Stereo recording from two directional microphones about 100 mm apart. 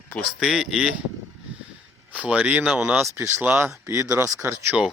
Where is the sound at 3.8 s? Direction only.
30° right (ahead or behind).